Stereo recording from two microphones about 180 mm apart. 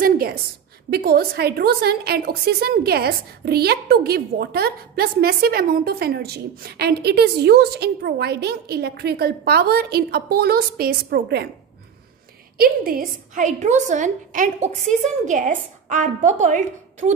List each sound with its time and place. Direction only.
0.0 s a sound: 55° right (ahead or behind)
0.8 s a woman's voice: 60° right (ahead or behind)
12.5 s a woman's voice: 55° right (ahead or behind)